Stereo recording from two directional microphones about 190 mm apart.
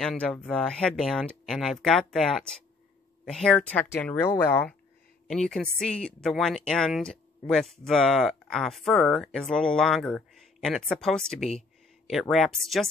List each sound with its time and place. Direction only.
0.0 s speech: 5° left (ahead or behind)